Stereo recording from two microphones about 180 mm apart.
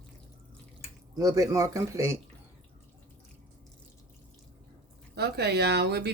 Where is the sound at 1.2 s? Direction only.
20° right (ahead or behind).